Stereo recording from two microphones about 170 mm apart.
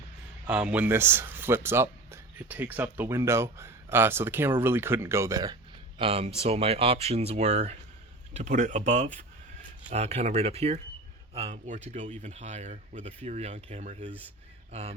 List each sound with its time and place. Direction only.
0.4 s speech: 10° right (ahead or behind)
6.0 s speech: 35° right (ahead or behind)